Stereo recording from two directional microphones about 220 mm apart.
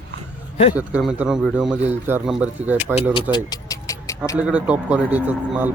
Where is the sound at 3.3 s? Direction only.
15° left (ahead or behind).